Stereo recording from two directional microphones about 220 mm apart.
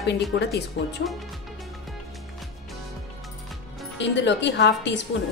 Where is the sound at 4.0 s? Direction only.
55° left (ahead or behind).